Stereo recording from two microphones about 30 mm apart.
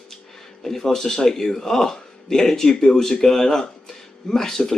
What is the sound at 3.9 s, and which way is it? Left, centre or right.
Music, centre.